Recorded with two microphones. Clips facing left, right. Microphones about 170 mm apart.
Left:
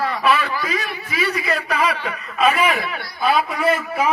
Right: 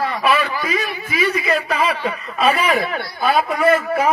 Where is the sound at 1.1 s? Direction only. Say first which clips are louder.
Right 3 dB; 20° right (ahead or behind).